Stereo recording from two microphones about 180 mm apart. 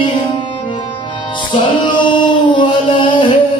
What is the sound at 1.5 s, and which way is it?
Music, 25° left (ahead or behind).